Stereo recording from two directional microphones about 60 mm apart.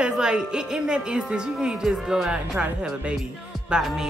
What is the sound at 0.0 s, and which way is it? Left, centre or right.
Speech, centre.